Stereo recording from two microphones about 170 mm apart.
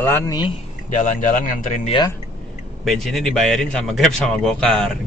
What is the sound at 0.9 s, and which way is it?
Speech, 50° left (ahead or behind).